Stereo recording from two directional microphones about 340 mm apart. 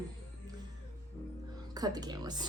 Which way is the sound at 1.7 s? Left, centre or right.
Centre.